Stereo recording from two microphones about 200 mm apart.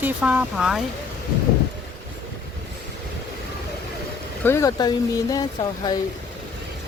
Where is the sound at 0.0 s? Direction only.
5° right (ahead or behind).